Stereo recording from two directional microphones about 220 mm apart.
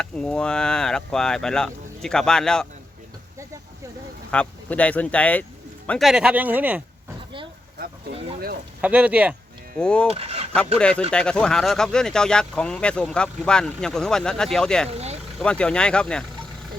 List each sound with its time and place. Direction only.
0.0 s speech: 5° left (ahead or behind)
4.3 s speech: 5° left (ahead or behind)
8.8 s speech: 5° right (ahead or behind)
9.7 s speech: 5° left (ahead or behind)
10.1 s speech: 25° right (ahead or behind)
10.8 s speech: 5° left (ahead or behind)
14.8 s speech: 30° right (ahead or behind)
15.4 s speech: 5° left (ahead or behind)